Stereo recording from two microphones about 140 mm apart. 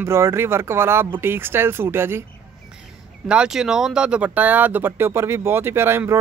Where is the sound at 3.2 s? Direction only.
5° right (ahead or behind).